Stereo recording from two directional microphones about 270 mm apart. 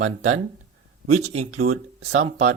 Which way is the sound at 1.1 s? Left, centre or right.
Right.